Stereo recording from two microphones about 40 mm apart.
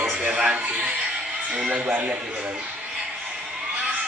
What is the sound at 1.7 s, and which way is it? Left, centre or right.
Speech, right.